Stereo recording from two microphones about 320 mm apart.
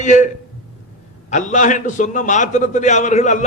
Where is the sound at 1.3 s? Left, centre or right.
Left.